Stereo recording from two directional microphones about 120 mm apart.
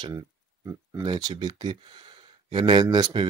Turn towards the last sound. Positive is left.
turn(degrees=-35)  # may be behind; listen again after turning